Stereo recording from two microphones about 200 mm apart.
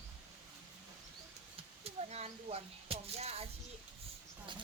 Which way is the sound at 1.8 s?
30° right (ahead or behind).